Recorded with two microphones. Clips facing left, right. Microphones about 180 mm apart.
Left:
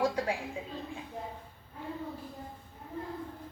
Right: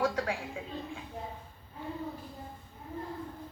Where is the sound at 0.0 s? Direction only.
15° left (ahead or behind).